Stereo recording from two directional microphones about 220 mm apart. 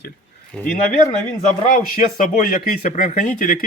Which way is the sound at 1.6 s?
35° left (ahead or behind).